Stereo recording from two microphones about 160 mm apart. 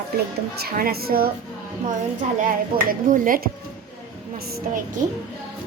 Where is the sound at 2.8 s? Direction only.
60° right (ahead or behind).